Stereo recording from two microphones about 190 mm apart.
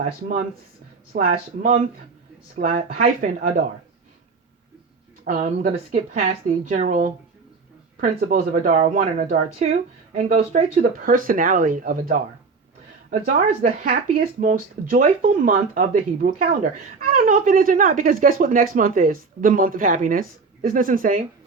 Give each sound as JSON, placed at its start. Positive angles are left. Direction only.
{"t": 0.0, "sound": "speech", "side_deg": -40}
{"t": 5.2, "sound": "speech", "side_deg": -40}
{"t": 10.9, "sound": "speech", "side_deg": -45}